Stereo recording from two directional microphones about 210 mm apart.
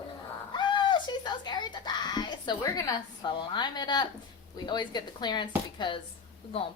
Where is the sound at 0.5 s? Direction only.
20° left (ahead or behind).